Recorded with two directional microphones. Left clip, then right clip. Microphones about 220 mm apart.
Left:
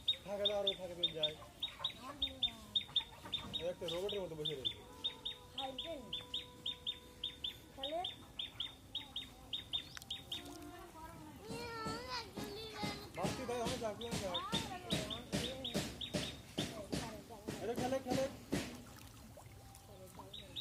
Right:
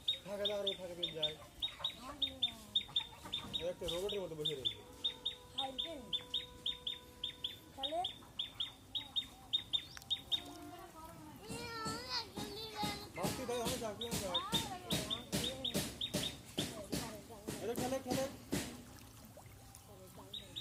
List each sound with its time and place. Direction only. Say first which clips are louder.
0.0 s bird: left 1 dB; 40° right (ahead or behind)
11.4 s music: right 1 dB; 40° right (ahead or behind)